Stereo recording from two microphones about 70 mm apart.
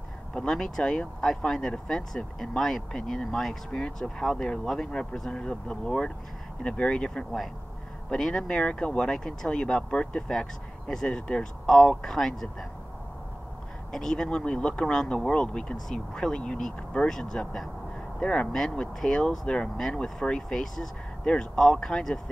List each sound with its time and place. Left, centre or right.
0.3 s speech: centre
13.9 s speech: centre